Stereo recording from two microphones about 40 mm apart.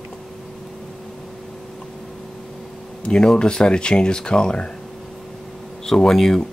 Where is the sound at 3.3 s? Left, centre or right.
Left.